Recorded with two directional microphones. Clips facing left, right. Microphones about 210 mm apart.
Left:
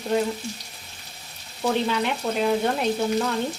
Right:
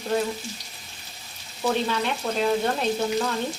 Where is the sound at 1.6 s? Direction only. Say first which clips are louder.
Left 1 dB; 10° left (ahead or behind).